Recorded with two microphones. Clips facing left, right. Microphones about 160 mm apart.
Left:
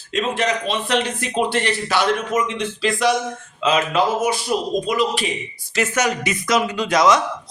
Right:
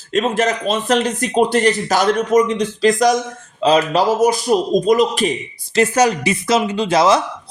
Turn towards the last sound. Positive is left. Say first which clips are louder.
# right 2 dB
turn(degrees=-30)  # may be behind; listen again after turning